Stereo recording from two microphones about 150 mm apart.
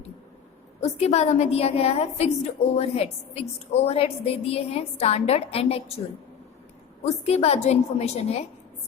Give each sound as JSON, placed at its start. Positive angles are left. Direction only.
{"t": 0.8, "sound": "a woman's voice", "side_deg": 45}
{"t": 7.0, "sound": "a woman's voice", "side_deg": 45}